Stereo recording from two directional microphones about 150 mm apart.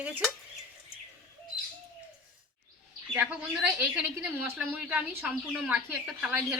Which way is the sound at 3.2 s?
10° right (ahead or behind).